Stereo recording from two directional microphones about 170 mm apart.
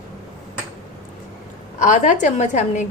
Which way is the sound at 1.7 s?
45° left (ahead or behind).